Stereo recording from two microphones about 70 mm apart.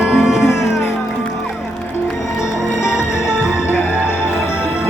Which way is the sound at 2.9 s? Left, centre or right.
Left.